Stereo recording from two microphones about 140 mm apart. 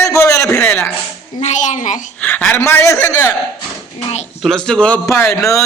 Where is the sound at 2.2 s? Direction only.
10° left (ahead or behind).